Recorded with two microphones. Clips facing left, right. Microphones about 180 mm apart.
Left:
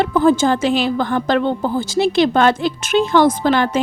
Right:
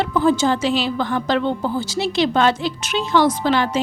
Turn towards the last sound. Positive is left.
turn(degrees=50)  # may be behind; listen again after turning